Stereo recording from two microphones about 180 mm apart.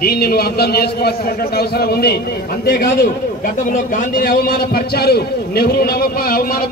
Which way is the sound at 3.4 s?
50° left (ahead or behind).